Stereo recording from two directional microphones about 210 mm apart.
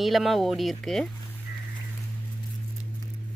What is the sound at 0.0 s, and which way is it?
Speech, centre (ahead or behind).